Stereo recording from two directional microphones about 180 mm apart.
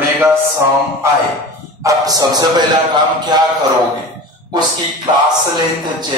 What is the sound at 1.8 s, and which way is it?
Speech, 20° right (ahead or behind).